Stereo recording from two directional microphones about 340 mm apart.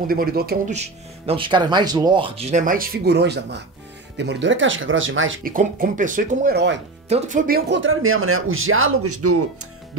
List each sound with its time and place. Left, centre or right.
0.1 s speech: right